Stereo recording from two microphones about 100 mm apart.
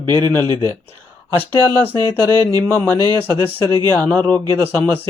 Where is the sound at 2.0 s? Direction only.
45° right (ahead or behind).